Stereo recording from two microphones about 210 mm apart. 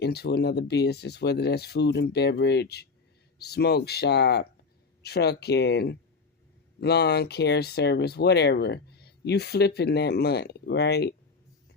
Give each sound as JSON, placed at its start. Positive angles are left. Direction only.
{"t": 0.0, "sound": "speech", "side_deg": 50}